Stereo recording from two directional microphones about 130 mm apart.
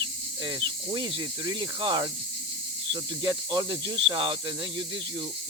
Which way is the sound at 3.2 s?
35° right (ahead or behind).